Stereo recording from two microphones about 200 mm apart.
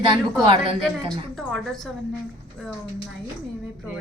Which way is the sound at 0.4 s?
30° right (ahead or behind).